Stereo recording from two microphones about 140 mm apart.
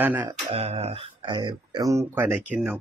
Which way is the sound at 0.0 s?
15° right (ahead or behind).